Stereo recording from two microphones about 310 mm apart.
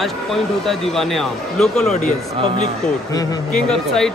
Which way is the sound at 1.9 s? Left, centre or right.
Left.